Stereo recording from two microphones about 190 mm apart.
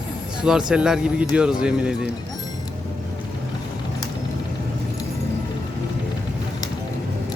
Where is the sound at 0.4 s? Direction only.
5° right (ahead or behind).